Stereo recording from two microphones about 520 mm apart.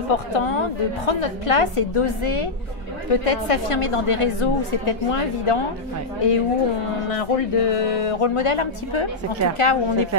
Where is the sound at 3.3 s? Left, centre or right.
Left.